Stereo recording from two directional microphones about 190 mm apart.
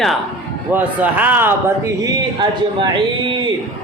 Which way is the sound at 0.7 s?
10° right (ahead or behind).